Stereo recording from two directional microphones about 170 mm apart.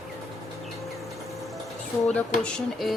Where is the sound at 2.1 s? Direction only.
5° left (ahead or behind).